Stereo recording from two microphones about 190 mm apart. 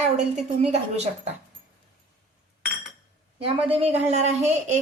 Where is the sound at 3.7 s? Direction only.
30° right (ahead or behind).